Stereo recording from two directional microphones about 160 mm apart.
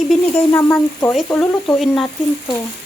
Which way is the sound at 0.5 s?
15° left (ahead or behind).